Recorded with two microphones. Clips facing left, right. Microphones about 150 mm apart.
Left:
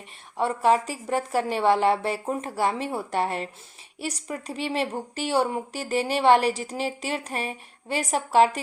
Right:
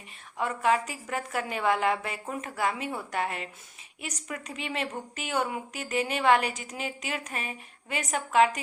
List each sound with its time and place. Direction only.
0.3 s a woman's voice: 35° left (ahead or behind)